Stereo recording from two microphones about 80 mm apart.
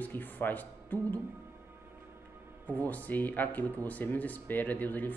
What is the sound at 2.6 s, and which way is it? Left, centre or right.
Speech, centre.